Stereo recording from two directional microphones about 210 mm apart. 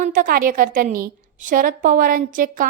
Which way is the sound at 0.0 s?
40° right (ahead or behind).